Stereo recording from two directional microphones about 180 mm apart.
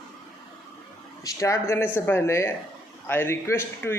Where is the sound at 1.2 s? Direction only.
15° left (ahead or behind).